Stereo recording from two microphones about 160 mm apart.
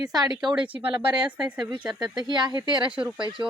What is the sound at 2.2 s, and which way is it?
Speech, 30° right (ahead or behind).